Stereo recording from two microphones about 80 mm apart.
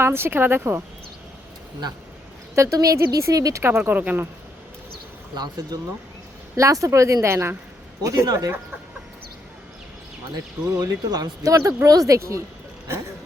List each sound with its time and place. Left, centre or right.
0.0 s speech: right
2.7 s speech: right
3.6 s speech: right
5.3 s speech: right
6.6 s speech: right
10.3 s speech: right